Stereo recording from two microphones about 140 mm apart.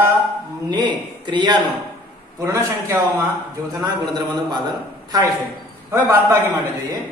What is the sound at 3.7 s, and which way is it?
Speech, 30° right (ahead or behind).